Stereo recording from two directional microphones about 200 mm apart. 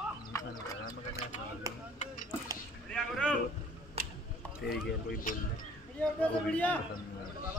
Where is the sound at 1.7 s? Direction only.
15° right (ahead or behind).